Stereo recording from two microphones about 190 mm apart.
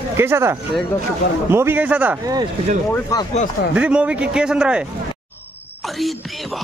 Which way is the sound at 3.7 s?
5° right (ahead or behind).